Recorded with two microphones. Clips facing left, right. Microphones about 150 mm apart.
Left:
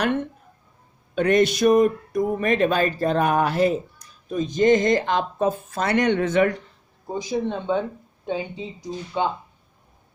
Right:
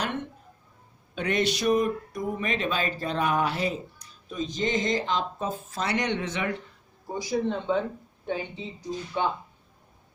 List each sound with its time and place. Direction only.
1.1 s speech: 50° left (ahead or behind)
7.1 s speech: 15° left (ahead or behind)